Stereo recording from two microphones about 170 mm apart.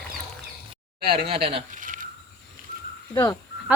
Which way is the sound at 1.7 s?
50° right (ahead or behind).